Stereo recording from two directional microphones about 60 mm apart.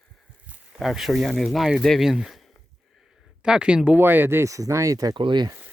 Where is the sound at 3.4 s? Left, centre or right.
Centre.